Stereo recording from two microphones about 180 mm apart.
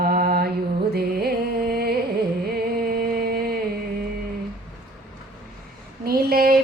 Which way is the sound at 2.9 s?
55° right (ahead or behind).